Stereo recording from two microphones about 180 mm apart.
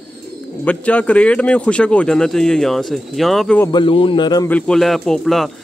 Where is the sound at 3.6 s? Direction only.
25° left (ahead or behind).